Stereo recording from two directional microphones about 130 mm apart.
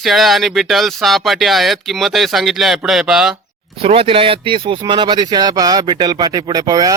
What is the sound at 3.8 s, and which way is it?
A man's voice, 50° right (ahead or behind).